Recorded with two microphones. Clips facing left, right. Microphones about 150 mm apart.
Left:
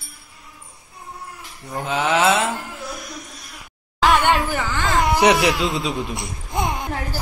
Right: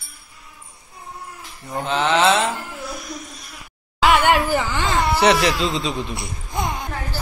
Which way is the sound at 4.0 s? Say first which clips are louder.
Right 1 dB; 5° right (ahead or behind).